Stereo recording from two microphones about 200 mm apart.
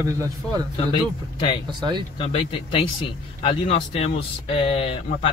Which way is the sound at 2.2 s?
25° left (ahead or behind).